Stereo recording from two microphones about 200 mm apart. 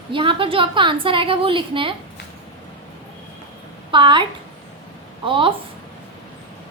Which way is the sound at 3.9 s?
25° right (ahead or behind).